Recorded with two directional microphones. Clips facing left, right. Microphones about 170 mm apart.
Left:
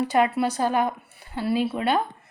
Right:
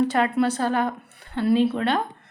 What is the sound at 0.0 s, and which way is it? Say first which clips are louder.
A woman's voice: right 1 dB; 10° left (ahead or behind).